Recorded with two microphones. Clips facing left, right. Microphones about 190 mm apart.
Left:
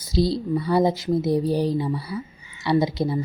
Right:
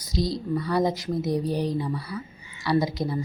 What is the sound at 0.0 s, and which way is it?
Speech, 30° left (ahead or behind).